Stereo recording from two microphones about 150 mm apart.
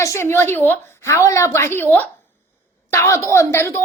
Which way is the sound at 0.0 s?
20° left (ahead or behind).